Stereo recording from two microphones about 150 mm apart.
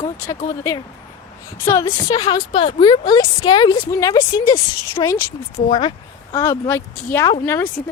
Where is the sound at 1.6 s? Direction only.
20° left (ahead or behind).